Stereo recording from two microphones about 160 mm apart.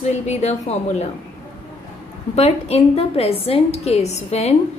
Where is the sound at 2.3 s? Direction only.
40° left (ahead or behind).